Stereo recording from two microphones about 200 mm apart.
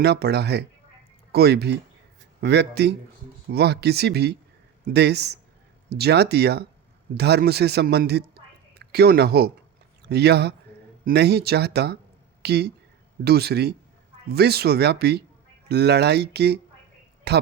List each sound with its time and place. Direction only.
0.0 s a man's voice: 55° right (ahead or behind)